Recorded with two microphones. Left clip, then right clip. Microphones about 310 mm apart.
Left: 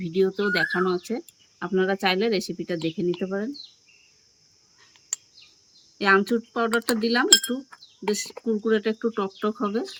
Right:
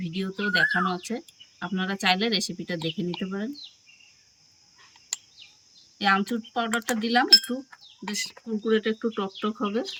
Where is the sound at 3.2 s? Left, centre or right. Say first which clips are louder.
Left 5 dB; centre.